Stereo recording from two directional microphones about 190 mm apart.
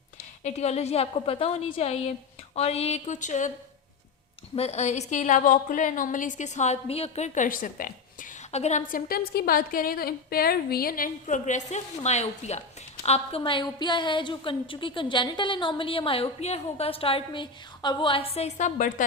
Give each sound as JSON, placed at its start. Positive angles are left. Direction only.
{"t": 0.4, "sound": "a woman's voice", "side_deg": 35}
{"t": 4.5, "sound": "a woman's voice", "side_deg": 35}